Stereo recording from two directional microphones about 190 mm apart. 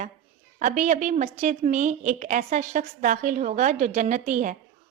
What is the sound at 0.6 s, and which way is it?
A woman's voice, 40° right (ahead or behind).